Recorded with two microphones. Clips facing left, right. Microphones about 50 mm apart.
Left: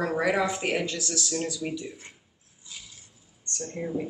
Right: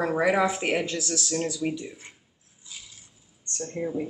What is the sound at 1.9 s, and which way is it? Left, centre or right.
Speech, centre.